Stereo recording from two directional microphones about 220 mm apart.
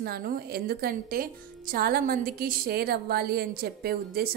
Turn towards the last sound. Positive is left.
turn(degrees=-45)  # may be behind; listen again after turning